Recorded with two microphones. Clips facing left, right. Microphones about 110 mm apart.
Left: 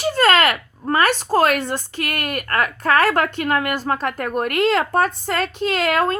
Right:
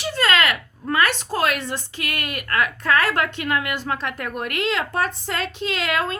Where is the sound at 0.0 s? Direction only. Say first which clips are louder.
Left 5 dB; 45° left (ahead or behind).